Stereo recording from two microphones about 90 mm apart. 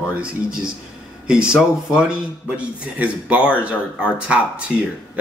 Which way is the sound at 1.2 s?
10° right (ahead or behind).